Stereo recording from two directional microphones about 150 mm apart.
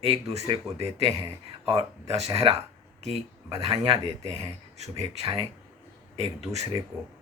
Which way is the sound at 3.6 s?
40° right (ahead or behind).